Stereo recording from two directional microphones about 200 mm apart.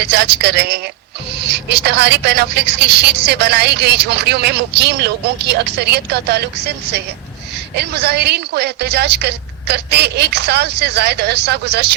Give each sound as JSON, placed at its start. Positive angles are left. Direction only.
{"t": 0.0, "sound": "a woman's voice", "side_deg": -55}
{"t": 7.8, "sound": "a woman's voice", "side_deg": -55}